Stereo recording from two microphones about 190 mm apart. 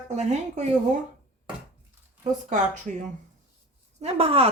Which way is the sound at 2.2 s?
40° right (ahead or behind).